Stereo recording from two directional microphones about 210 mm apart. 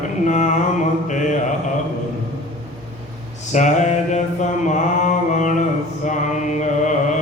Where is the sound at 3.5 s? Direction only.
35° left (ahead or behind).